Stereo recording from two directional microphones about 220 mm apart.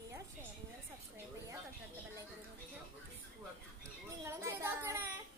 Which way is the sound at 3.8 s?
10° right (ahead or behind).